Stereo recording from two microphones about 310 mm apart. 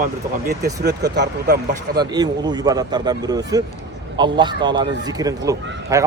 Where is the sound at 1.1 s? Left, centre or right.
Right.